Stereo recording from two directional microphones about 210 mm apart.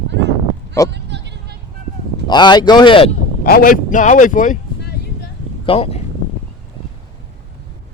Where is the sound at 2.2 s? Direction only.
20° left (ahead or behind).